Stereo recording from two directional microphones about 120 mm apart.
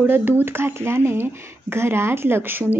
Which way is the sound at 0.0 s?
15° right (ahead or behind).